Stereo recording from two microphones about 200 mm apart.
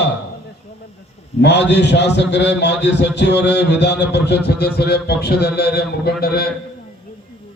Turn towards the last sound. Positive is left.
turn(degrees=50)  # may be behind; listen again after turning